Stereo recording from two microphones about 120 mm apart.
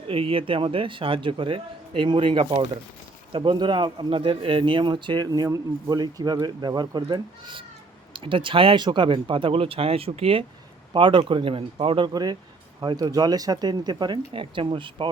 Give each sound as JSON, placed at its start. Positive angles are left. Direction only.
{"t": 0.1, "sound": "a man's voice", "side_deg": -50}